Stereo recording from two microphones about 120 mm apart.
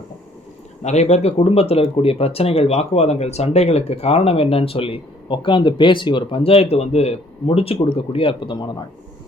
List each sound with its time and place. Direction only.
0.8 s speech: 70° left (ahead or behind); by 8.7 s 40° left (ahead or behind)